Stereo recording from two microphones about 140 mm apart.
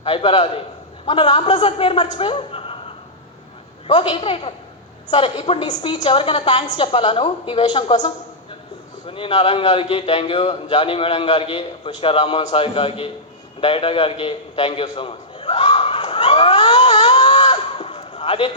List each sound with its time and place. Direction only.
0.0 s a man's voice: 40° left (ahead or behind)
3.8 s a man's voice: 40° left (ahead or behind)
13.6 s a sound: 40° left (ahead or behind)